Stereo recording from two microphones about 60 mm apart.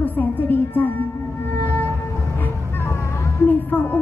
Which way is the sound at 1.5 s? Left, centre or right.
Left.